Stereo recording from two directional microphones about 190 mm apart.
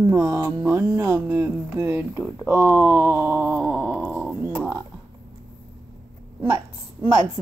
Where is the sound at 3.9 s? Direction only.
5° right (ahead or behind).